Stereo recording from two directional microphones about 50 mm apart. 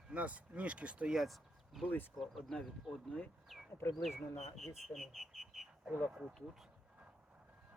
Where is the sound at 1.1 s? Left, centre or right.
Centre.